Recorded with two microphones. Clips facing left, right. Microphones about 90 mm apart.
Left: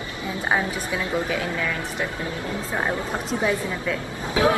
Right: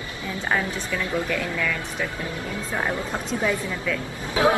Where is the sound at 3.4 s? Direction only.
10° left (ahead or behind).